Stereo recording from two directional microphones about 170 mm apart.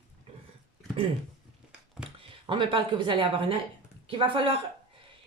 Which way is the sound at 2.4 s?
30° right (ahead or behind).